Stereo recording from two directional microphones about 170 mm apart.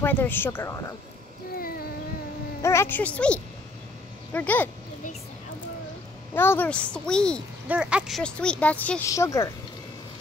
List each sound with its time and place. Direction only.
0.0 s a woman's voice: 10° left (ahead or behind)
1.5 s a sound: 60° left (ahead or behind)
2.6 s a woman's voice: 15° left (ahead or behind)
6.3 s a woman's voice: 15° left (ahead or behind)
7.6 s speech: 5° right (ahead or behind)
8.2 s a woman's voice: 5° left (ahead or behind)